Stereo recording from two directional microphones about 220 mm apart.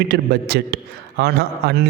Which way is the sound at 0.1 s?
45° right (ahead or behind).